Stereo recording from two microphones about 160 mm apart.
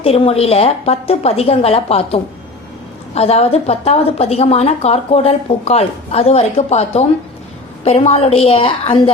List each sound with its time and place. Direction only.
0.0 s a woman's voice: 40° left (ahead or behind)